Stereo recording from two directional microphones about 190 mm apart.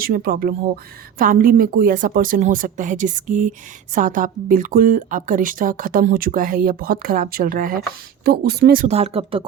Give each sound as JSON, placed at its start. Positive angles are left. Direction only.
{"t": 0.0, "sound": "a woman's voice", "side_deg": -50}
{"t": 8.9, "sound": "speech", "side_deg": -35}